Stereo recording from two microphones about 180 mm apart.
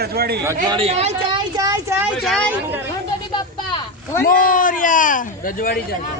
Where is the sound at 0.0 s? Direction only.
60° right (ahead or behind).